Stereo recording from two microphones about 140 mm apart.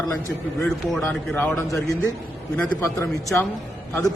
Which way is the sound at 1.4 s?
15° left (ahead or behind).